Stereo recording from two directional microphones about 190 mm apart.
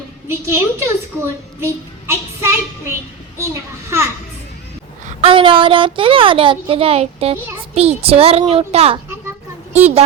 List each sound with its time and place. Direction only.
0.3 s a child's voice: 15° right (ahead or behind)
5.0 s a woman's voice: 30° right (ahead or behind)